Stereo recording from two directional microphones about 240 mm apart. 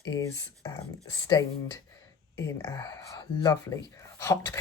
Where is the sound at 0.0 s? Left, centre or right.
Centre.